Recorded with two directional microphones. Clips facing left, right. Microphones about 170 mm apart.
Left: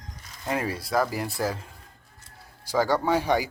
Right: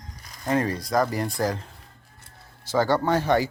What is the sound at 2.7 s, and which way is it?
Speech, 10° left (ahead or behind).